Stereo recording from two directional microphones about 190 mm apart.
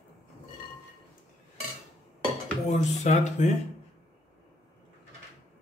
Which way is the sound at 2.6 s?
40° left (ahead or behind).